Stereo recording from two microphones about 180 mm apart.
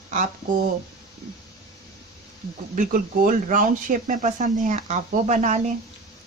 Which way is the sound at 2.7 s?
50° right (ahead or behind).